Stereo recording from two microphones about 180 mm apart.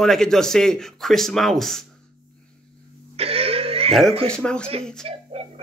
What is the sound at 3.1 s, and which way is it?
Throat clearing, 35° right (ahead or behind).